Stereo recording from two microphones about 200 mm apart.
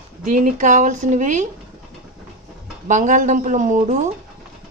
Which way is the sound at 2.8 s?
40° right (ahead or behind).